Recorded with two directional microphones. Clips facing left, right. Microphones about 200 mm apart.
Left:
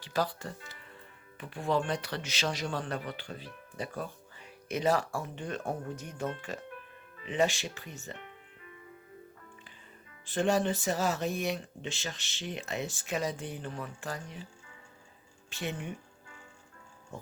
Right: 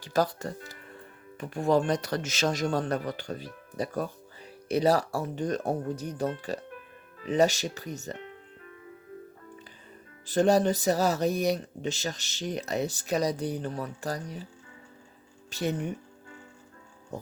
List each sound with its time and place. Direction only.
0.0 s speech: 45° right (ahead or behind)
10.2 s speech: 40° right (ahead or behind)
15.4 s speech: 40° right (ahead or behind)